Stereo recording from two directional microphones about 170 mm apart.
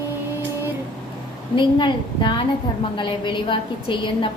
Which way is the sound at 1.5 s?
30° left (ahead or behind).